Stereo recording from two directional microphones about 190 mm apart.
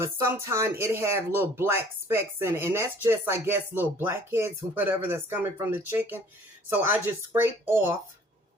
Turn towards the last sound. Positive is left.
turn(degrees=-10)  # may be behind; listen again after turning